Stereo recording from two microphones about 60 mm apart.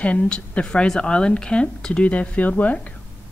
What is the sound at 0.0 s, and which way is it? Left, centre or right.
Speech, left.